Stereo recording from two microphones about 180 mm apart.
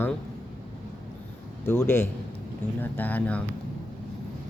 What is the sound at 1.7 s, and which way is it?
Speech, 15° left (ahead or behind).